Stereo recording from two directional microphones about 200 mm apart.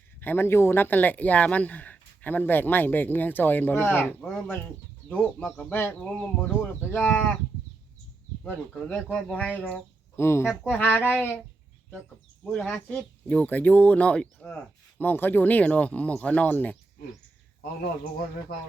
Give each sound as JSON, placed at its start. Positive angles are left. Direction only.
{"t": 0.2, "sound": "speech", "side_deg": 10}
{"t": 8.4, "sound": "speech", "side_deg": 5}
{"t": 10.5, "sound": "speech", "side_deg": 0}
{"t": 12.5, "sound": "speech", "side_deg": 5}